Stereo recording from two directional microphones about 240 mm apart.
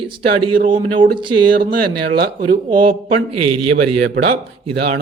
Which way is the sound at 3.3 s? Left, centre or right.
Right.